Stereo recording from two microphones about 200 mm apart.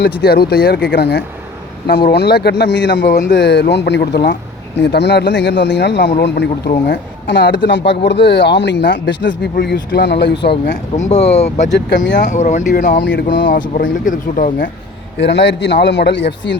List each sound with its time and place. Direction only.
0.2 s speech: 50° left (ahead or behind)
10.5 s speech: 35° left (ahead or behind)
13.1 s speech: 55° left (ahead or behind)
15.2 s speech: 60° left (ahead or behind)